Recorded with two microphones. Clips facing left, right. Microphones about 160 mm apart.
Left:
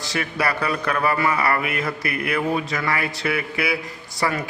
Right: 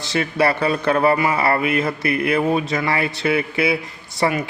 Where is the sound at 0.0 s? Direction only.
25° right (ahead or behind).